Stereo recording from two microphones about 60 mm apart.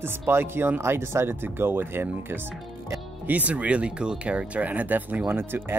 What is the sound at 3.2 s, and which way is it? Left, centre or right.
Speech, right.